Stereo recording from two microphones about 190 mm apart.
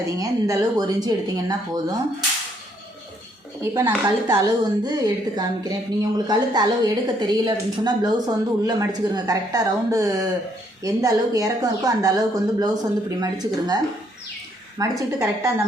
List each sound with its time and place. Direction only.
0.2 s speech: 20° right (ahead or behind)
3.6 s a woman's voice: 15° right (ahead or behind)